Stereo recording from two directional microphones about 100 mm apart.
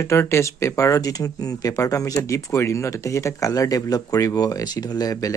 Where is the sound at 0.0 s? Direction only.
30° left (ahead or behind).